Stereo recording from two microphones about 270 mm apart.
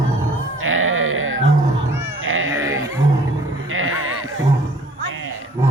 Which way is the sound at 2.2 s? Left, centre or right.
Right.